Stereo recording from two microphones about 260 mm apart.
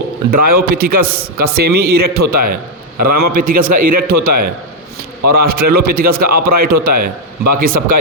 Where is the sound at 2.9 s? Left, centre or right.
Right.